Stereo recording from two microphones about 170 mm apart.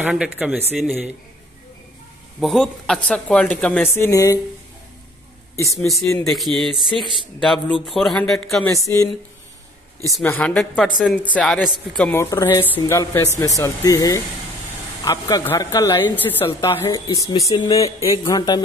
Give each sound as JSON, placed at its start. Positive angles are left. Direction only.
{"t": 0.1, "sound": "speech", "side_deg": -5}
{"t": 2.4, "sound": "a woman's voice", "side_deg": 0}
{"t": 5.9, "sound": "a woman's voice", "side_deg": 15}
{"t": 6.2, "sound": "speech", "side_deg": 0}
{"t": 8.6, "sound": "speech", "side_deg": 20}
{"t": 10.2, "sound": "a woman's voice", "side_deg": 10}
{"t": 12.2, "sound": "a woman's voice", "side_deg": 20}